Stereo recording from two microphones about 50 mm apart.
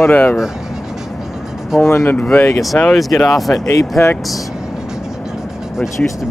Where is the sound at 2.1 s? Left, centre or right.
Left.